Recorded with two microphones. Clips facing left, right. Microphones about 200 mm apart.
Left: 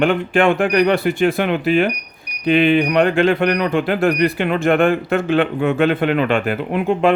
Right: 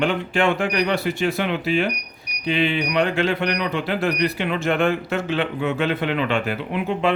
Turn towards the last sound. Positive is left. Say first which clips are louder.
# left 6 dB
turn(degrees=50)  # may be behind; listen again after turning